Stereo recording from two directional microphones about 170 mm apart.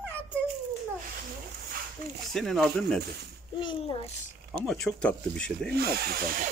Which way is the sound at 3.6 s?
30° left (ahead or behind).